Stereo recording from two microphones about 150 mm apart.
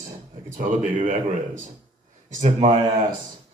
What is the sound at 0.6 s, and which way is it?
Speech, 60° right (ahead or behind).